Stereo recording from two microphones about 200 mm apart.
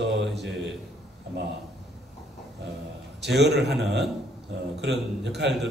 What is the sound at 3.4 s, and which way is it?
Speech, 55° right (ahead or behind).